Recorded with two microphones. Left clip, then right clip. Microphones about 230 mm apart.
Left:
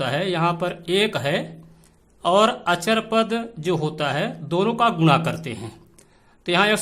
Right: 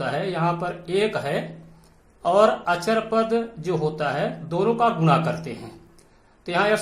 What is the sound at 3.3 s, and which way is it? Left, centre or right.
A man's voice, left.